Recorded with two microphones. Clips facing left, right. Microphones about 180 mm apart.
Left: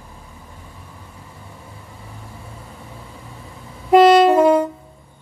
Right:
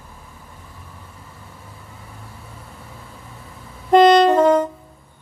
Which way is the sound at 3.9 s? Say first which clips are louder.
Left 1 dB; 10° left (ahead or behind).